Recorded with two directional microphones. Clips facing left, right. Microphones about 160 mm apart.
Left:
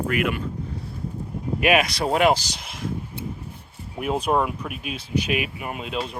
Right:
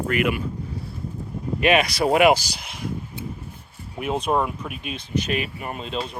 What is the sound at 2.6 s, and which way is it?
Speech, centre (ahead or behind).